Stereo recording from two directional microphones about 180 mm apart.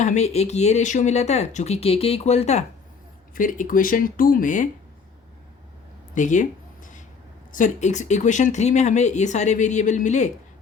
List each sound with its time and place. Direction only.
0.0 s speech: 40° left (ahead or behind)
3.3 s speech: 50° left (ahead or behind)
6.1 s a sound: 45° left (ahead or behind)
7.5 s speech: 45° left (ahead or behind)